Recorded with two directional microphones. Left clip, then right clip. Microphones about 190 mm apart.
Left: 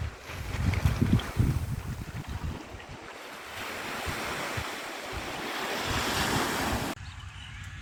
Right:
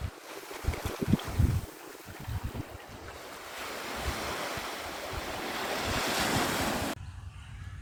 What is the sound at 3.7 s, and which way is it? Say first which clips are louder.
Waves: left 2 dB; 60° right (ahead or behind).